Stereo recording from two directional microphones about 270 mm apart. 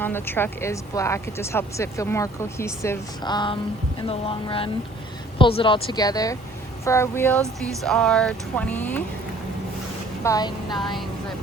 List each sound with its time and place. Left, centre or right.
0.0 s speech: centre
10.2 s speech: centre